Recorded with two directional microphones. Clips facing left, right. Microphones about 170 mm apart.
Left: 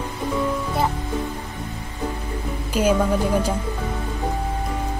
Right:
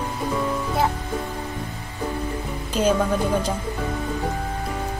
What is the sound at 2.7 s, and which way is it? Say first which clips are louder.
Speech: left 1 dB; 10° left (ahead or behind).